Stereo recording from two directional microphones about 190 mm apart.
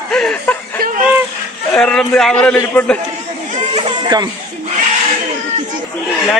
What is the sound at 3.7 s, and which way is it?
Baby cry, 20° right (ahead or behind).